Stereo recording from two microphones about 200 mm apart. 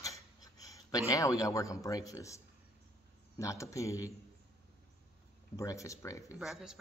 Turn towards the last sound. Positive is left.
turn(degrees=-5)  # may be behind; listen again after turning